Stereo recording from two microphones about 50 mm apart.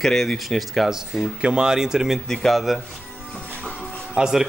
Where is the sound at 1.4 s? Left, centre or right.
Centre.